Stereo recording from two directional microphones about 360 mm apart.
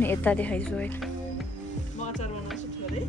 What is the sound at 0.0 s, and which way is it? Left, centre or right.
Speech, centre.